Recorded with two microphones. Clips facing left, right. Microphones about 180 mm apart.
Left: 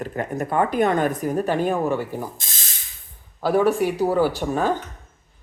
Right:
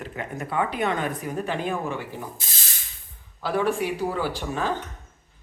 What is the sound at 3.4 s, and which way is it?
Speech, 45° left (ahead or behind).